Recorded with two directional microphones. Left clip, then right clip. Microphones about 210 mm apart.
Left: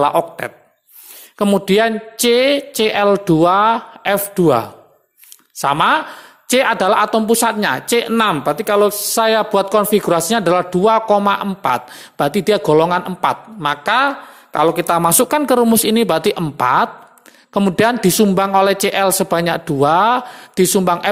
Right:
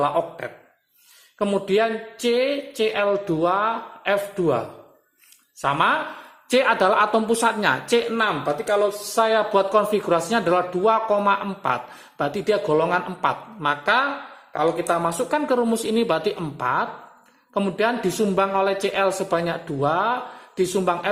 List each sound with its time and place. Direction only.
0.0 s speech: 40° left (ahead or behind)
5.6 s speech: 40° left (ahead or behind)